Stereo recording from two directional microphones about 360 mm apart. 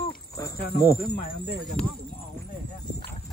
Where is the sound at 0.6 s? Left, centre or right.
Left.